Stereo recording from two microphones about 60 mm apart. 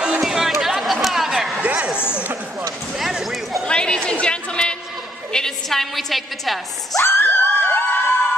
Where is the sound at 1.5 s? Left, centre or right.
Right.